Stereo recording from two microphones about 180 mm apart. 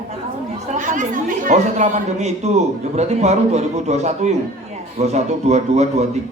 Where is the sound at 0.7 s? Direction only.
45° right (ahead or behind).